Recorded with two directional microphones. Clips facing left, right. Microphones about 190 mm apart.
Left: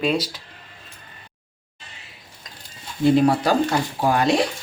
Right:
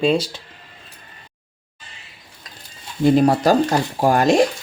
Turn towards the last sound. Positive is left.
turn(degrees=-45)  # may be behind; listen again after turning